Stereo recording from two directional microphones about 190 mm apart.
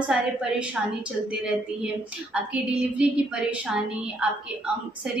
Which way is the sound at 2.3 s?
5° right (ahead or behind).